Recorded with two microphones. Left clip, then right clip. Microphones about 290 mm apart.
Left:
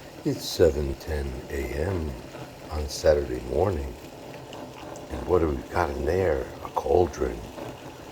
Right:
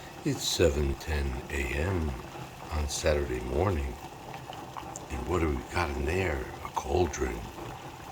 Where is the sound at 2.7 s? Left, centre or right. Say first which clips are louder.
Left 7 dB; centre.